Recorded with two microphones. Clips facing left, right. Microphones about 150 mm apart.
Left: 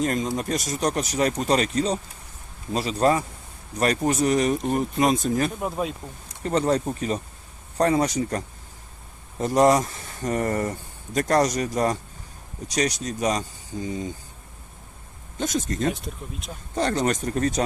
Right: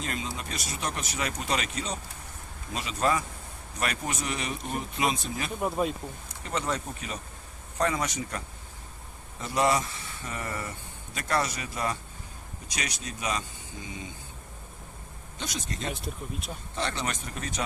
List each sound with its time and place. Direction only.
0.0 s speech: 45° left (ahead or behind)
5.5 s speech: centre (ahead or behind)
6.4 s speech: 35° left (ahead or behind)
15.4 s speech: 45° left (ahead or behind)
15.9 s speech: centre (ahead or behind)
16.7 s speech: 40° left (ahead or behind)